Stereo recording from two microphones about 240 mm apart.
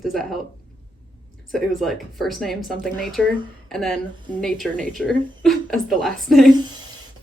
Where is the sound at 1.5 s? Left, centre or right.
Centre.